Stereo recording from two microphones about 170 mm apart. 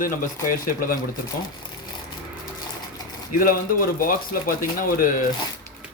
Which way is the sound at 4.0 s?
55° left (ahead or behind).